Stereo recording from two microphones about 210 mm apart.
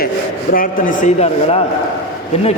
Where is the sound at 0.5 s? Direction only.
40° left (ahead or behind).